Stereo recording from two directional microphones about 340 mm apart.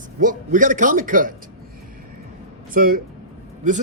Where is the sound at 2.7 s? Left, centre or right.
Right.